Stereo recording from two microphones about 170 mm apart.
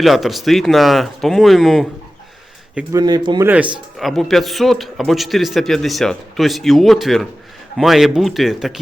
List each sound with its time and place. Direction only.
0.0 s a man's voice: centre (ahead or behind)
2.9 s speech: 25° right (ahead or behind)
3.4 s a man's voice: 10° right (ahead or behind)